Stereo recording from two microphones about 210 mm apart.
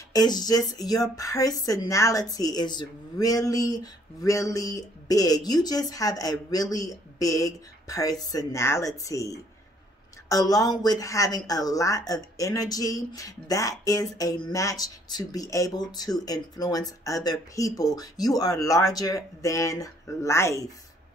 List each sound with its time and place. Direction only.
0.1 s speech: 20° left (ahead or behind)